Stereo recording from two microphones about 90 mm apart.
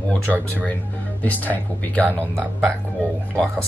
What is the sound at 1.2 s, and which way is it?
Speech, 20° left (ahead or behind).